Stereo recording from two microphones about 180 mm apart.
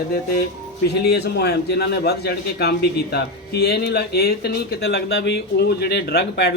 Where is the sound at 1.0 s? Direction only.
65° left (ahead or behind).